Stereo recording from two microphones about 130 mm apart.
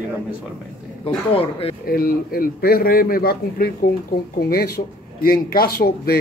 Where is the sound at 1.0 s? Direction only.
45° left (ahead or behind).